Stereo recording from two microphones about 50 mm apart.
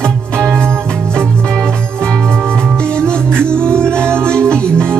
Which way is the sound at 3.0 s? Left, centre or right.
Centre.